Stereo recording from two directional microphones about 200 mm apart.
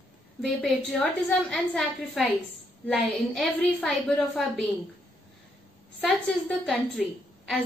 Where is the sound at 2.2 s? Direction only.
Centre (ahead or behind).